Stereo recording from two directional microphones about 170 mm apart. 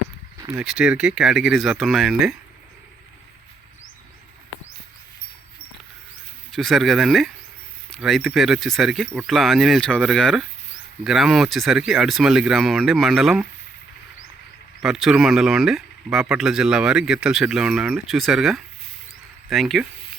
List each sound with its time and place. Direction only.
0.3 s a sound: 15° right (ahead or behind)
0.6 s speech: centre (ahead or behind)
6.5 s speech: centre (ahead or behind)
14.8 s speech: centre (ahead or behind)